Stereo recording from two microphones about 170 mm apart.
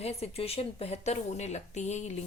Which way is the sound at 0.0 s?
35° left (ahead or behind).